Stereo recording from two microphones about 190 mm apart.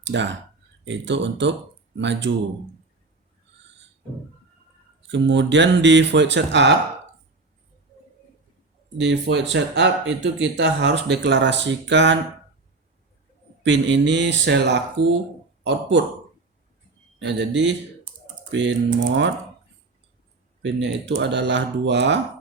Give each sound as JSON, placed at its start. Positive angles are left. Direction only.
{"t": 0.0, "sound": "speech", "side_deg": -70}
{"t": 5.0, "sound": "speech", "side_deg": -70}
{"t": 9.0, "sound": "speech", "side_deg": -65}
{"t": 13.6, "sound": "speech", "side_deg": -70}
{"t": 15.0, "sound": "speech", "side_deg": -30}
{"t": 15.6, "sound": "speech", "side_deg": -70}
{"t": 17.2, "sound": "speech", "side_deg": -70}
{"t": 20.6, "sound": "speech", "side_deg": -70}